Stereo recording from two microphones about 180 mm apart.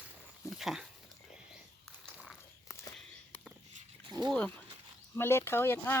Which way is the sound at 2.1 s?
Centre (ahead or behind).